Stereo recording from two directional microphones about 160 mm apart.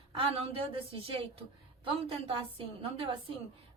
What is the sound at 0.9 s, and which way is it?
Speech, 35° right (ahead or behind).